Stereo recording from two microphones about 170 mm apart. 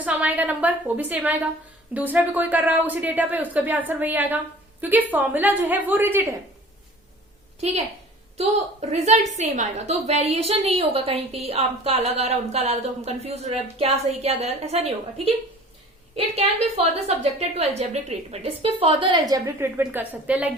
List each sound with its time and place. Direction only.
0.0 s a woman's voice: 10° right (ahead or behind)
8.9 s a woman's voice: 45° right (ahead or behind); by 20.5 s 10° right (ahead or behind)